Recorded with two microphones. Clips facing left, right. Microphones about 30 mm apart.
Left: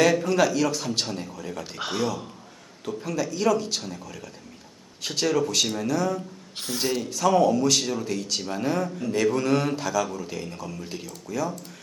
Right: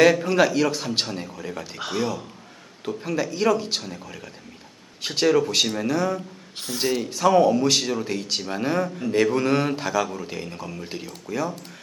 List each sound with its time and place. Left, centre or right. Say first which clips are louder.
0.0 s speech: right 3 dB; centre
1.8 s speech: right 1 dB; centre
2.8 s a man's voice: right 2 dB; right
6.6 s speech: right 2 dB; centre
7.0 s a man's voice: right 3 dB; centre